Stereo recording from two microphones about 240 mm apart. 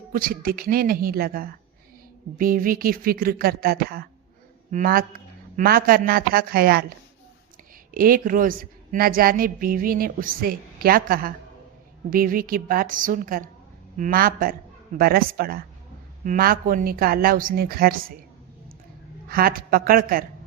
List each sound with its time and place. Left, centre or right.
0.1 s a woman's voice: right
7.9 s a woman's voice: right
19.3 s a woman's voice: right